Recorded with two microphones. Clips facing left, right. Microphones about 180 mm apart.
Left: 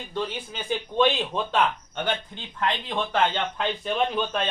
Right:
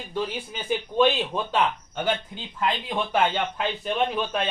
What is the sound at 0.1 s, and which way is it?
Speech, 5° right (ahead or behind).